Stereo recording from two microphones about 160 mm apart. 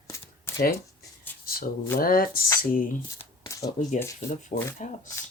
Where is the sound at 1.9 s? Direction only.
65° left (ahead or behind).